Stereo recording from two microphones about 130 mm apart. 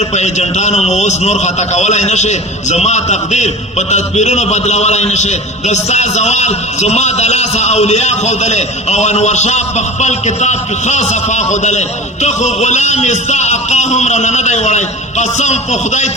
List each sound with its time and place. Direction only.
0.1 s a man's voice: 60° left (ahead or behind)